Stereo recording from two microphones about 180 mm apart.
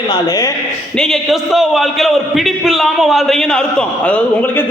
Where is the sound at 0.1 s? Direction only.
20° left (ahead or behind).